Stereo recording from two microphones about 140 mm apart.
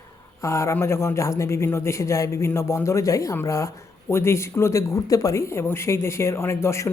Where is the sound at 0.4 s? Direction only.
20° left (ahead or behind).